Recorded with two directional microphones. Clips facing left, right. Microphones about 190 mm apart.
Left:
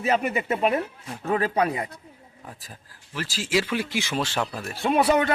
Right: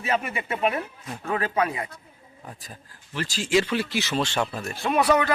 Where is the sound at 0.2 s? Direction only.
40° left (ahead or behind).